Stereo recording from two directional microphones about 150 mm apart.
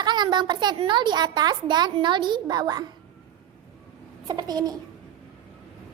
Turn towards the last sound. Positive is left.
turn(degrees=-25)  # may be behind; listen again after turning